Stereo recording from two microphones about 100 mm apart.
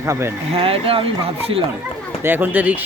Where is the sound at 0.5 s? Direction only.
70° right (ahead or behind).